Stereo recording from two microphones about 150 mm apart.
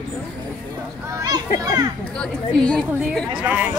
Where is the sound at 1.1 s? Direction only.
25° right (ahead or behind).